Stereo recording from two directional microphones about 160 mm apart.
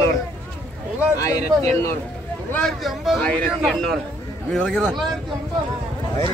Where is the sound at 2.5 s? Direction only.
Centre (ahead or behind).